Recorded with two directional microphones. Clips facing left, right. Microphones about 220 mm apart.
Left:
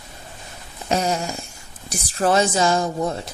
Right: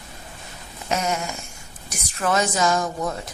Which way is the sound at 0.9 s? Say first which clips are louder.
Left 3 dB; 35° left (ahead or behind).